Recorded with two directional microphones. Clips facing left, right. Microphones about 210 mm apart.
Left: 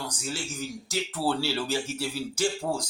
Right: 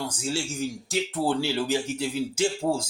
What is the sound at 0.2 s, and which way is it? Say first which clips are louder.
Speech: right 5 dB; 25° right (ahead or behind).